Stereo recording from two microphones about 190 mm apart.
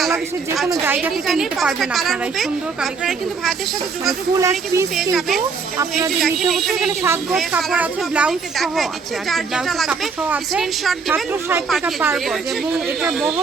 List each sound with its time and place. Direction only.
0.0 s a woman's voice: centre (ahead or behind)
4.4 s speech: 15° right (ahead or behind)
4.9 s a woman's voice: centre (ahead or behind)